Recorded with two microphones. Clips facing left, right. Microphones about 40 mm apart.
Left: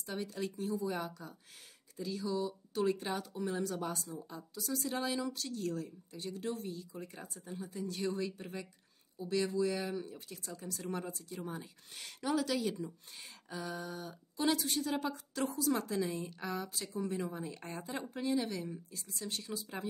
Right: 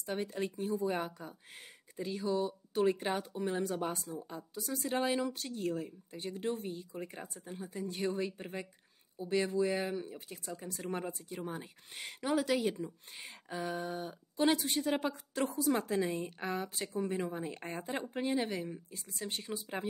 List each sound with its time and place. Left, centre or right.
0.0 s speech: right